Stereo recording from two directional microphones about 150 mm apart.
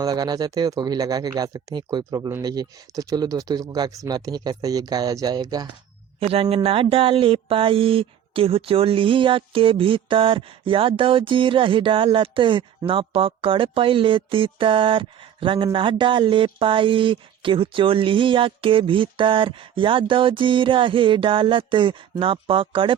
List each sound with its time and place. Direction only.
0.0 s speech: 25° right (ahead or behind)
6.1 s mantra: 40° right (ahead or behind)